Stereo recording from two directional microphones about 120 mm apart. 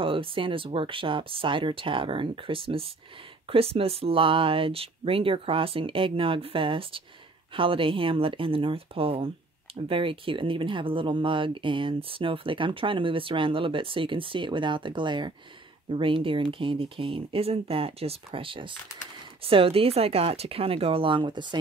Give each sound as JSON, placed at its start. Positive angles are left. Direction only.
{"t": 0.0, "sound": "speech", "side_deg": -50}